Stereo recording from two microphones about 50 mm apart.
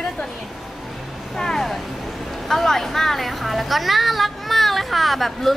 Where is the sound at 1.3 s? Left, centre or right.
Centre.